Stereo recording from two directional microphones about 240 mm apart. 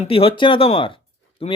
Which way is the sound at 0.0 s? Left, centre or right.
Left.